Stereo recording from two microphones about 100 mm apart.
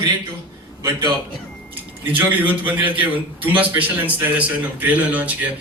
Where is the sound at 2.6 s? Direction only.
15° right (ahead or behind).